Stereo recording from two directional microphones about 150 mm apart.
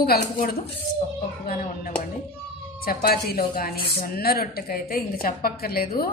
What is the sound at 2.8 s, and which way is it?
A woman's voice, 90° left.